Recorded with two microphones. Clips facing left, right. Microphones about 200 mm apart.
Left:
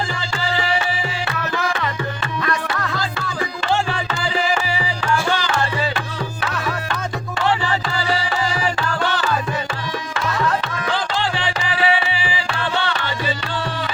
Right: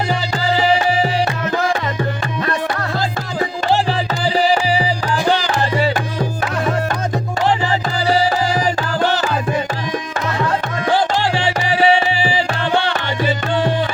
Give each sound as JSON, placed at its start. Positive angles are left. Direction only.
{"t": 0.1, "sound": "music", "side_deg": -40}
{"t": 7.4, "sound": "music", "side_deg": -35}
{"t": 10.8, "sound": "music", "side_deg": -40}